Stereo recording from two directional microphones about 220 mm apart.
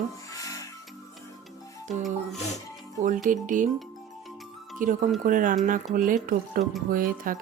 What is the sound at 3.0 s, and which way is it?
Speech, 35° right (ahead or behind).